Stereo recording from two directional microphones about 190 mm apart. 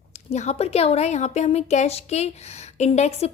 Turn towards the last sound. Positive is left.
turn(degrees=35)  # may be behind; listen again after turning